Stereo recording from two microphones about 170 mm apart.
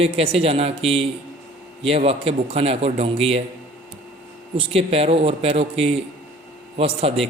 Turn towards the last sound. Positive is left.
turn(degrees=-35)  # may be behind; listen again after turning